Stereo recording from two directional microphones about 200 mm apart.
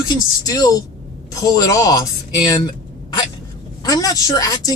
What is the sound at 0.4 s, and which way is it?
A woman's voice, 20° left (ahead or behind).